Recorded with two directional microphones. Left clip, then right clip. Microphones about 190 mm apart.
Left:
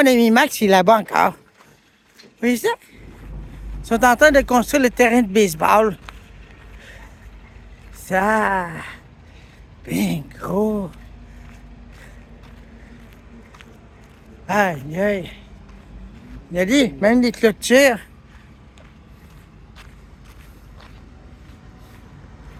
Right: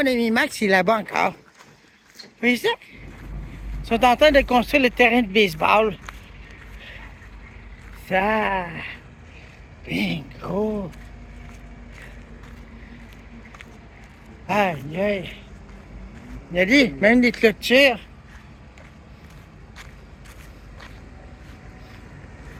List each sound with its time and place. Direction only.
0.0 s speech: 40° left (ahead or behind)
2.4 s speech: 35° left (ahead or behind)
3.8 s speech: 35° left (ahead or behind)
8.0 s speech: 35° left (ahead or behind)
9.9 s speech: 40° left (ahead or behind)
14.4 s speech: 30° left (ahead or behind)
16.6 s speech: 20° left (ahead or behind)
17.7 s speech: 40° left (ahead or behind)